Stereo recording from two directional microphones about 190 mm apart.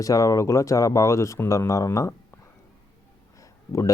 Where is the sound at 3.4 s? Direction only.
15° left (ahead or behind).